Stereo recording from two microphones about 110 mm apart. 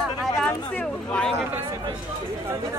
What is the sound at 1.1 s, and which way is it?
Speech, 5° left (ahead or behind).